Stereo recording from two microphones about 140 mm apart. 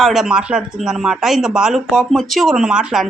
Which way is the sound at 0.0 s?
Centre (ahead or behind).